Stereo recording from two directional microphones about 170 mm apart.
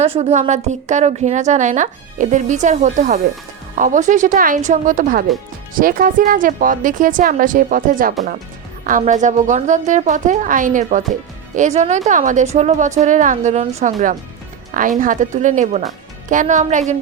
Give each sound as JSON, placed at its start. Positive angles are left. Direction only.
{"t": 0.0, "sound": "a woman's voice", "side_deg": -40}